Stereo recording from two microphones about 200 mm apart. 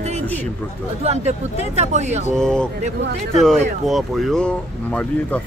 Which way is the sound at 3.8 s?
Centre (ahead or behind).